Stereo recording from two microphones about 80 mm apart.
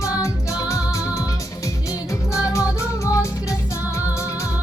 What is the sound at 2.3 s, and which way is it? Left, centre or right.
Music, left.